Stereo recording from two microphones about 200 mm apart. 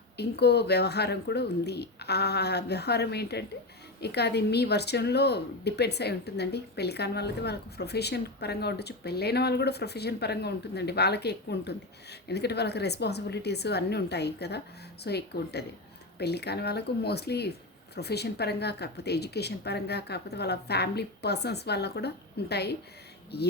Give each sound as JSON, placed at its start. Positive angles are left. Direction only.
{"t": 0.2, "sound": "speech", "side_deg": 55}